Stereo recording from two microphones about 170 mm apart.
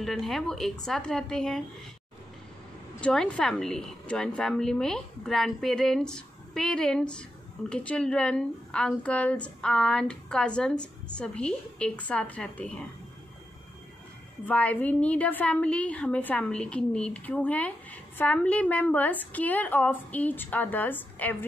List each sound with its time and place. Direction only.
0.0 s a woman's voice: centre (ahead or behind)
3.0 s a woman's voice: 5° left (ahead or behind)
14.4 s a woman's voice: 10° left (ahead or behind)